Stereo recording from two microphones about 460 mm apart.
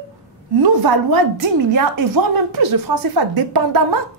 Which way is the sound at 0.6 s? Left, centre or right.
Right.